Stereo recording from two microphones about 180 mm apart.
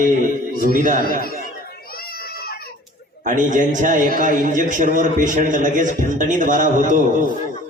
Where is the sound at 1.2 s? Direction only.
55° left (ahead or behind).